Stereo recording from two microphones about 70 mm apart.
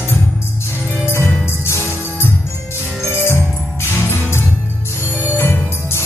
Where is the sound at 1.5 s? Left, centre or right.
Left.